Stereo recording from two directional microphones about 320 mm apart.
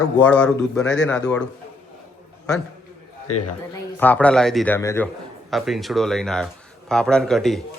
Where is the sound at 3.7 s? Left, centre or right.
Centre.